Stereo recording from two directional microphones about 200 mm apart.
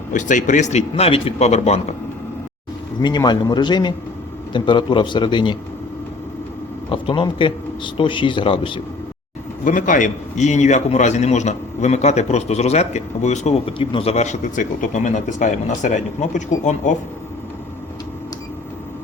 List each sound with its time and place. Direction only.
0.1 s a man's voice: 40° left (ahead or behind)
3.0 s a man's voice: 20° left (ahead or behind)
6.9 s a man's voice: 25° left (ahead or behind)
9.6 s a man's voice: 40° left (ahead or behind)